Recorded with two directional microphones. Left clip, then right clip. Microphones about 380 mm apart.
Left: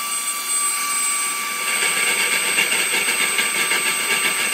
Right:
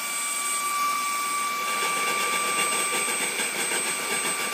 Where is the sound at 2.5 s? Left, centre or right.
Centre.